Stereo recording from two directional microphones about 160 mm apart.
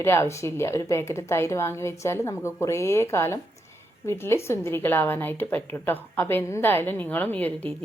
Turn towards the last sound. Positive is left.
turn(degrees=10)  # may be behind; listen again after turning